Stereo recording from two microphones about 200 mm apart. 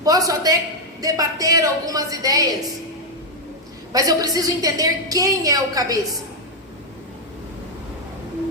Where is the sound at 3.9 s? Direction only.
20° right (ahead or behind).